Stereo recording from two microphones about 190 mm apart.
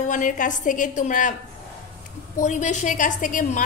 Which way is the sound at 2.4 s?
40° left (ahead or behind).